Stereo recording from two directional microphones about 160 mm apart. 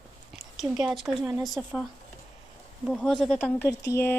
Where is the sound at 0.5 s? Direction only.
Centre (ahead or behind).